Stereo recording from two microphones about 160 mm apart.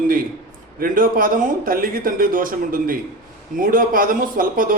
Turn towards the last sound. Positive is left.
turn(degrees=-60)  # may be behind; listen again after turning